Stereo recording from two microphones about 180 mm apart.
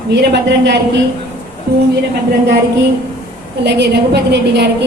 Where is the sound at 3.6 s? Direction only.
70° right (ahead or behind).